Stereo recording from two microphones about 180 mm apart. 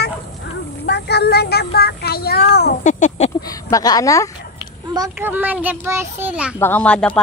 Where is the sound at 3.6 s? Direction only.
20° left (ahead or behind).